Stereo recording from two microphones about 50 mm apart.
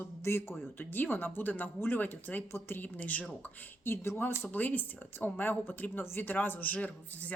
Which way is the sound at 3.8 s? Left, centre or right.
Left.